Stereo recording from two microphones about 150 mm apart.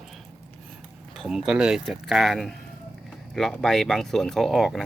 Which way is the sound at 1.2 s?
5° right (ahead or behind).